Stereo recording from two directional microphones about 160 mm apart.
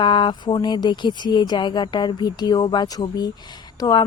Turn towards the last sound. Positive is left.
turn(degrees=25)  # may be behind; listen again after turning